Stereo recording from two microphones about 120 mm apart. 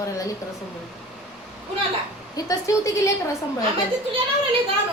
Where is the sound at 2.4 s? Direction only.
25° left (ahead or behind).